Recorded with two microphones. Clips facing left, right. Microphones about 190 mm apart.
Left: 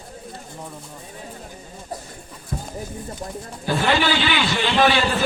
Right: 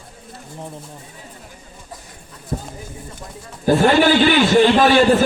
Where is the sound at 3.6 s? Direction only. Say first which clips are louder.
Right 7 dB; 45° right (ahead or behind).